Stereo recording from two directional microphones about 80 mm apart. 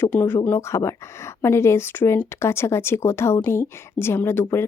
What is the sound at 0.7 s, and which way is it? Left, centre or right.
Speech, left.